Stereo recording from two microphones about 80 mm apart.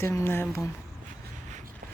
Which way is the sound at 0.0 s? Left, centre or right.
Left.